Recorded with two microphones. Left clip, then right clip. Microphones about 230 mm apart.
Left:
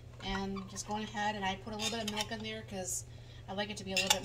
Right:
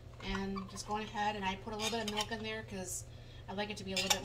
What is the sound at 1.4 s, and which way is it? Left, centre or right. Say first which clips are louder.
Speech: left 1 dB; centre.